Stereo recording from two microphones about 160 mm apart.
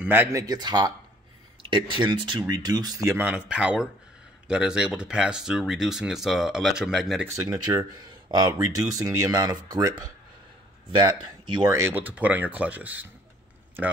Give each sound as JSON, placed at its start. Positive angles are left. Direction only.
{"t": 0.0, "sound": "speech", "side_deg": -15}
{"t": 7.3, "sound": "speech", "side_deg": -20}